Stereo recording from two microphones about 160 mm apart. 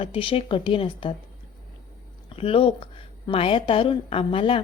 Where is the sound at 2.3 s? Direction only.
35° left (ahead or behind).